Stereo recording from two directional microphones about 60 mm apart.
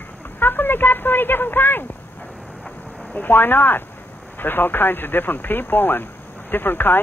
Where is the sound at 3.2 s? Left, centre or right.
Left.